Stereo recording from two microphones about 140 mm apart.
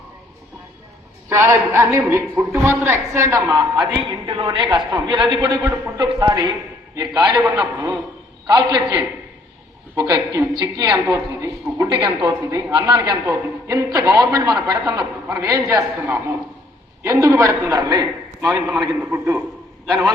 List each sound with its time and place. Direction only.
1.3 s a man's voice: 20° right (ahead or behind)
4.1 s a man's voice: 30° right (ahead or behind)
11.9 s a man's voice: 35° right (ahead or behind)
12.3 s a man's voice: 25° right (ahead or behind)
18.4 s a man's voice: 15° right (ahead or behind)